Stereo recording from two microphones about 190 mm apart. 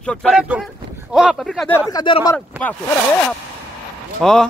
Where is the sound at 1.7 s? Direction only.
20° left (ahead or behind).